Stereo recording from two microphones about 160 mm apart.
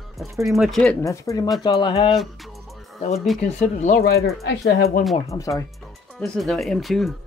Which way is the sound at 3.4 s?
45° left (ahead or behind).